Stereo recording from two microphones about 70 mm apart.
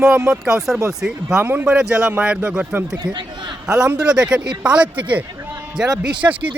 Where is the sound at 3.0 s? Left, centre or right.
Right.